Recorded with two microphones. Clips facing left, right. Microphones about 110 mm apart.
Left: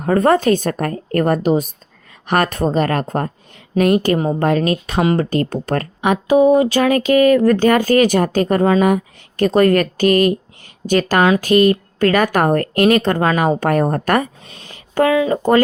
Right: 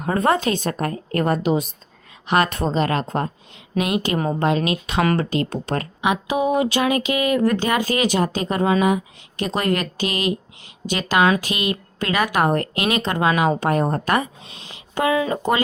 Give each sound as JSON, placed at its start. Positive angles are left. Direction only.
{"t": 0.0, "sound": "speech", "side_deg": 40}
{"t": 4.9, "sound": "speech", "side_deg": 25}
{"t": 5.2, "sound": "speech", "side_deg": 45}
{"t": 6.3, "sound": "speech", "side_deg": 35}
{"t": 15.2, "sound": "speech", "side_deg": 35}